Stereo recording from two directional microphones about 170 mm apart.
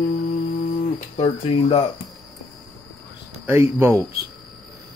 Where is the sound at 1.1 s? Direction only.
35° left (ahead or behind).